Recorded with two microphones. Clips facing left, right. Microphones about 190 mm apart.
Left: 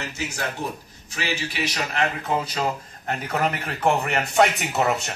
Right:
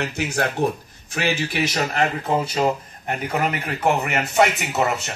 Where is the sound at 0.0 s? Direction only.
60° right (ahead or behind); by 2.7 s 25° right (ahead or behind).